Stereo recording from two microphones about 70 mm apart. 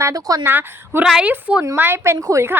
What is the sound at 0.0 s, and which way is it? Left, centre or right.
Speech, right.